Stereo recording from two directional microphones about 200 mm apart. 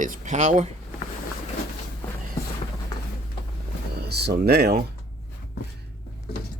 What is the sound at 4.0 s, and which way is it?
Speech, 55° right (ahead or behind).